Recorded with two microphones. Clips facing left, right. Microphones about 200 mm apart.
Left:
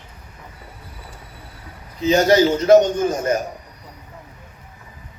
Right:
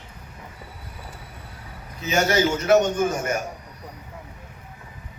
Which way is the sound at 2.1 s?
35° left (ahead or behind).